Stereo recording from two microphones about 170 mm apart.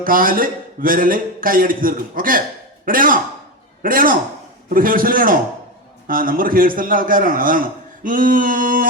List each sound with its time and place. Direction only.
0.0 s a man's voice: 55° right (ahead or behind)